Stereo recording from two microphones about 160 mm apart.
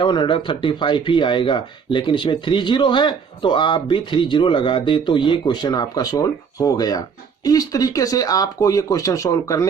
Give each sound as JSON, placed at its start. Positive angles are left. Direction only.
{"t": 0.0, "sound": "speech", "side_deg": 30}